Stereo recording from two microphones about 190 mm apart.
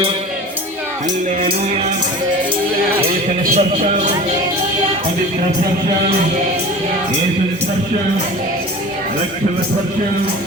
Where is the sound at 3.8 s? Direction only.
35° right (ahead or behind).